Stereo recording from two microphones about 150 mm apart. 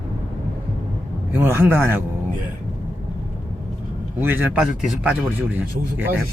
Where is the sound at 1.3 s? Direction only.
15° right (ahead or behind).